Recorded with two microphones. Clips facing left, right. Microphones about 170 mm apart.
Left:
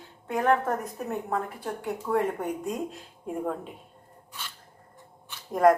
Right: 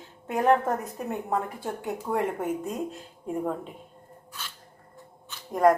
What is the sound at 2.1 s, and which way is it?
Speech, 5° right (ahead or behind).